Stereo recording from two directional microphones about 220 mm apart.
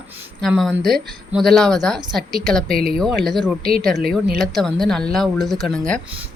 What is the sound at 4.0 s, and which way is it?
Speech, 45° right (ahead or behind).